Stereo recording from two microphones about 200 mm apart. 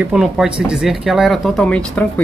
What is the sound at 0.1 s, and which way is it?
Speech, 5° right (ahead or behind).